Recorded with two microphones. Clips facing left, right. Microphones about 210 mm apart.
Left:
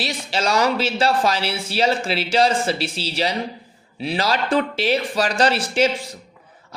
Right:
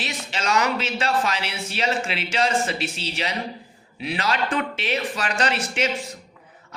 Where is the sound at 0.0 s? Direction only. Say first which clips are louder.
Left 5 dB; 35° left (ahead or behind).